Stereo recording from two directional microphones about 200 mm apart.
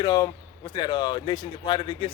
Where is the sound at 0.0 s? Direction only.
20° left (ahead or behind).